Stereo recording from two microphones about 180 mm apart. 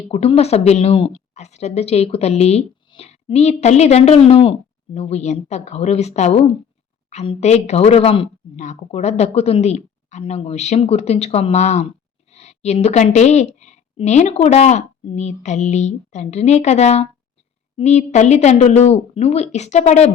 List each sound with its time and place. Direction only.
0.1 s a woman's voice: 35° left (ahead or behind)